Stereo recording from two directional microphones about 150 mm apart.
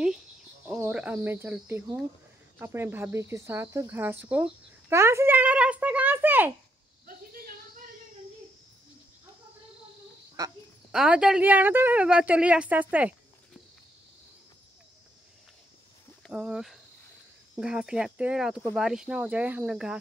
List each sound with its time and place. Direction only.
0.7 s speech: 10° right (ahead or behind)
7.1 s a sound: 80° right
10.4 s speech: 25° right (ahead or behind)
10.9 s speech: 5° right (ahead or behind)
16.3 s speech: 5° right (ahead or behind)